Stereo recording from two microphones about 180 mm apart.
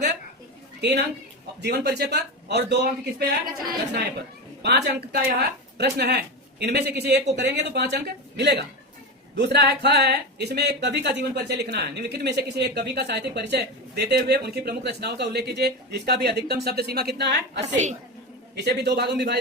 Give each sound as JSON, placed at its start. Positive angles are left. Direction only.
{"t": 0.8, "sound": "a woman's voice", "side_deg": -70}
{"t": 4.6, "sound": "a man's voice", "side_deg": -65}
{"t": 17.6, "sound": "a woman's voice", "side_deg": -40}
{"t": 18.5, "sound": "a man's voice", "side_deg": -65}